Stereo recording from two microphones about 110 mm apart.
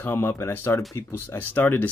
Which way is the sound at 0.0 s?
20° left (ahead or behind).